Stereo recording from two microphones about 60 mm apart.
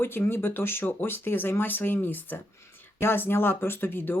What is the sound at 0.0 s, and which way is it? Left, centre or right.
Speech, left.